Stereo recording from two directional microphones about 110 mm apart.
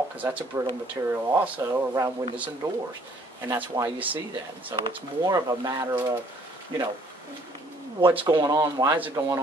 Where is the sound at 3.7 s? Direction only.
40° right (ahead or behind).